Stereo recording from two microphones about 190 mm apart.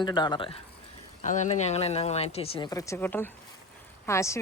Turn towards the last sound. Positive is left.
turn(degrees=15)  # may be behind; listen again after turning